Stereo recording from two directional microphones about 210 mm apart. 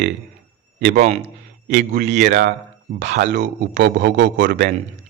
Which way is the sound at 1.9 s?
55° right (ahead or behind).